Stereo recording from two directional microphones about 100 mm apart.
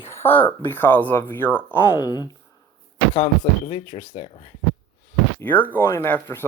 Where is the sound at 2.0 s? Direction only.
40° left (ahead or behind).